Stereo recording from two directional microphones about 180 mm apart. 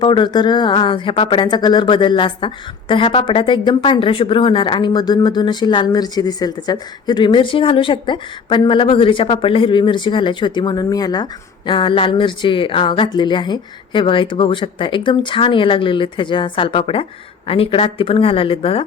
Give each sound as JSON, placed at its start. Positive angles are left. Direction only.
{"t": 0.0, "sound": "speech", "side_deg": 25}